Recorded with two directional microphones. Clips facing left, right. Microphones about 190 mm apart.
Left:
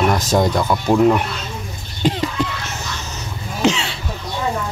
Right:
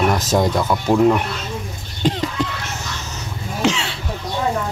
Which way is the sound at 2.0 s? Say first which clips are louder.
Left 1 dB; 5° left (ahead or behind).